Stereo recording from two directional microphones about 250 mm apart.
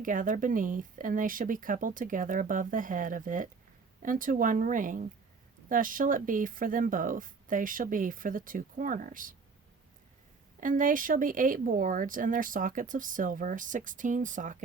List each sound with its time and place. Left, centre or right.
0.0 s speech: right
10.6 s speech: right